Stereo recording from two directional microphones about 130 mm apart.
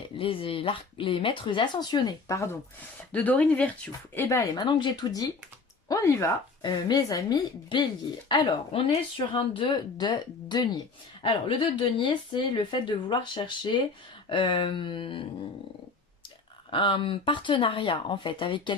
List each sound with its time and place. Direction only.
0.2 s speech: 45° left (ahead or behind); by 2.6 s 25° left (ahead or behind)
3.1 s speech: 10° left (ahead or behind)
6.6 s speech: 35° left (ahead or behind)
8.3 s speech: 45° left (ahead or behind)
11.2 s speech: 45° left (ahead or behind)
16.7 s speech: 40° left (ahead or behind)